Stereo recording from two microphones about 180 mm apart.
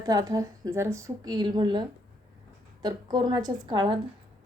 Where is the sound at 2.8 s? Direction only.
25° right (ahead or behind).